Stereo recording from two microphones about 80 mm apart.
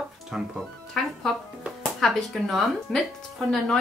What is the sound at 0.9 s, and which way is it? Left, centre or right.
A woman's voice, centre.